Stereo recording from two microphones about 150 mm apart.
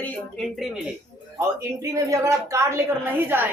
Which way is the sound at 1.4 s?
20° right (ahead or behind).